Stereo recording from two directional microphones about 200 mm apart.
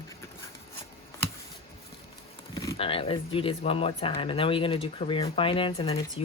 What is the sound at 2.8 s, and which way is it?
Speech, 30° left (ahead or behind).